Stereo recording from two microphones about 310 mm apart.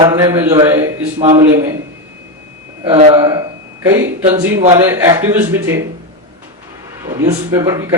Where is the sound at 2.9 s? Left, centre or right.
Centre.